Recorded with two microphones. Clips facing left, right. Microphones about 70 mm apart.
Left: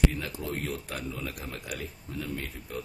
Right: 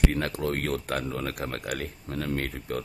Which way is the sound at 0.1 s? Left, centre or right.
Right.